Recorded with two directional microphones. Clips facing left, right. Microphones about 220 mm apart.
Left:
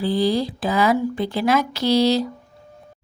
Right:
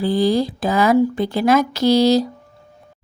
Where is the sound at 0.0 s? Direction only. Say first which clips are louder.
Right 3 dB; 45° right (ahead or behind).